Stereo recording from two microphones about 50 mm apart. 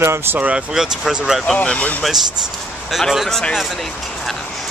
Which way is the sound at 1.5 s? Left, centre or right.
Left.